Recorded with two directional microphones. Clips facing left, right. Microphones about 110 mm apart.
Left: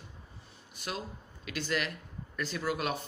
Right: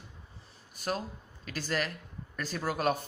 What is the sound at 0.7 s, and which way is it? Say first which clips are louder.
Speech: right 5 dB; 40° right (ahead or behind).